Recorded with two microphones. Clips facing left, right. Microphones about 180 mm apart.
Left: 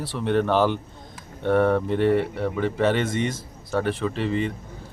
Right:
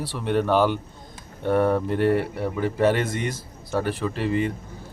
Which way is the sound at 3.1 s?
25° left (ahead or behind).